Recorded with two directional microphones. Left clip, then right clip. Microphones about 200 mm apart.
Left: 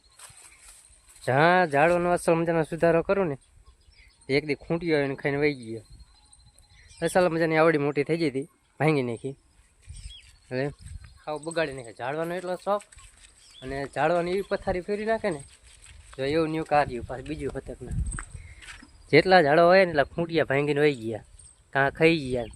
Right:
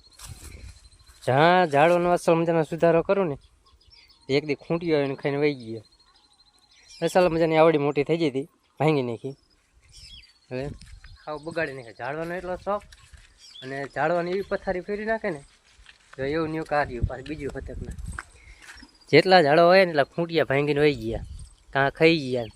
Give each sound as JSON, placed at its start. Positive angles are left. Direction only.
{"t": 1.2, "sound": "a man's voice", "side_deg": -10}
{"t": 7.0, "sound": "a man's voice", "side_deg": -5}
{"t": 10.5, "sound": "speech", "side_deg": 10}
{"t": 18.3, "sound": "a man's voice", "side_deg": -5}